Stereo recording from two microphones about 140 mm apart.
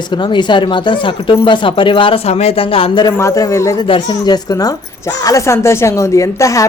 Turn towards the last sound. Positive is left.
turn(degrees=25)  # may be behind; listen again after turning